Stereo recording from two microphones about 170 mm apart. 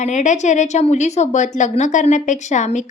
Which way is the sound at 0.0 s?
45° left (ahead or behind).